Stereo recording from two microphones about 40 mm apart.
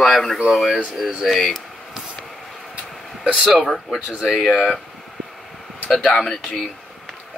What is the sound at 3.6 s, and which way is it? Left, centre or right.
Speech, centre.